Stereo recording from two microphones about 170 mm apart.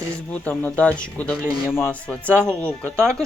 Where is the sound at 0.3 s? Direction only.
10° left (ahead or behind).